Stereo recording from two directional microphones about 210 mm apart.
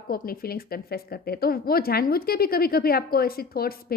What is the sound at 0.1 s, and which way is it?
A woman's voice, 45° left (ahead or behind).